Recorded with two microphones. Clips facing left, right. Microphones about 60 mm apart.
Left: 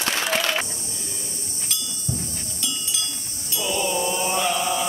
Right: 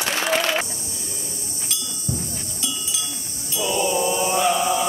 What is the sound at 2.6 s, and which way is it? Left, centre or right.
Cowbell, centre.